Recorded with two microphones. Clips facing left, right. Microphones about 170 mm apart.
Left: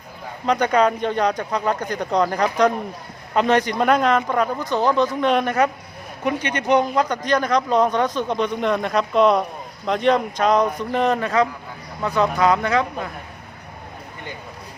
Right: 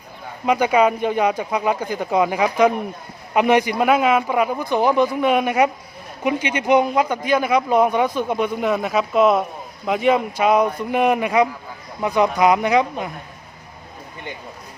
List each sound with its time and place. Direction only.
0.4 s speech: 10° right (ahead or behind)